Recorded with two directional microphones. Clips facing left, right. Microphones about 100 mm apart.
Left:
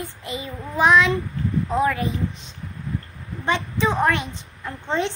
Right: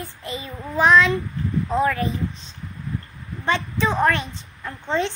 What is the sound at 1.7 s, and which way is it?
Speech, 15° left (ahead or behind).